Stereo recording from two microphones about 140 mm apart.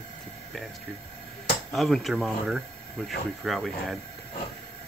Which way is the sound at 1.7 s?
Centre (ahead or behind).